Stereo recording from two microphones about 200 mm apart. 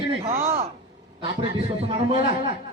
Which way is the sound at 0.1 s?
30° right (ahead or behind).